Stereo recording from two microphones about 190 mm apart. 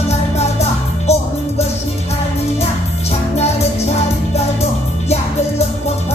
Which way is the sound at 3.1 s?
35° left (ahead or behind).